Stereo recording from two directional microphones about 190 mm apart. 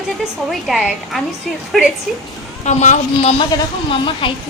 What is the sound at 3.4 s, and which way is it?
Speech, 25° left (ahead or behind).